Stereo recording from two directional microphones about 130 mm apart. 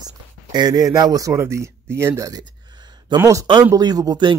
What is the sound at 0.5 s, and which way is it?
Speech, 30° right (ahead or behind).